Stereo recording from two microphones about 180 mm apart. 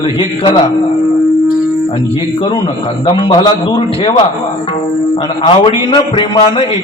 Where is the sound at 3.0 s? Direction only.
25° left (ahead or behind).